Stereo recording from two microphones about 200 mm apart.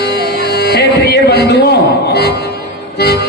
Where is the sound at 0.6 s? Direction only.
55° left (ahead or behind).